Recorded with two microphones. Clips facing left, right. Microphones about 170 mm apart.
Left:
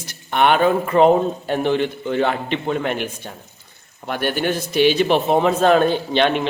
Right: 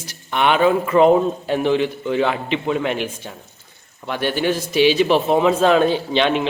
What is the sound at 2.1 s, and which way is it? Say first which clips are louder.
A man's voice: even; 45° left (ahead or behind).